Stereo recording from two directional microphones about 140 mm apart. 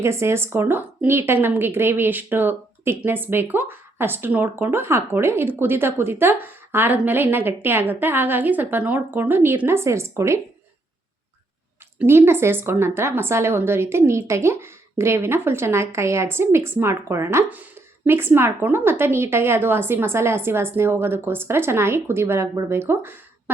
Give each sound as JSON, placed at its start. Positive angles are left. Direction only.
{"t": 0.0, "sound": "a woman's voice", "side_deg": -20}
{"t": 11.9, "sound": "a woman's voice", "side_deg": -15}